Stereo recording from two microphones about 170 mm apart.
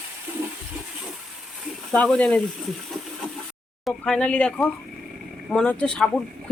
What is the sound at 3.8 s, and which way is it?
Speech, 5° left (ahead or behind).